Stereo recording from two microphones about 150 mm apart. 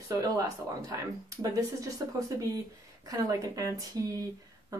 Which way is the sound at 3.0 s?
25° right (ahead or behind).